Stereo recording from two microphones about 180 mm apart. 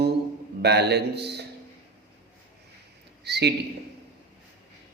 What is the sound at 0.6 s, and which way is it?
Speech, 65° right (ahead or behind).